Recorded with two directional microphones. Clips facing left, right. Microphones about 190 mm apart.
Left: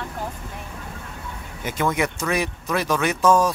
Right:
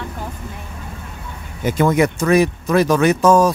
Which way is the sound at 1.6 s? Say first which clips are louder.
Right 8 dB; 35° right (ahead or behind).